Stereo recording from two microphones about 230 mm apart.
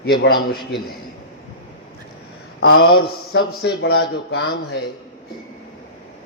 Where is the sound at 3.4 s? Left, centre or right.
Left.